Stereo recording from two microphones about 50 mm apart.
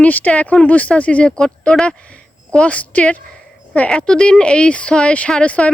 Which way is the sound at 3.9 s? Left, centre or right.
Centre.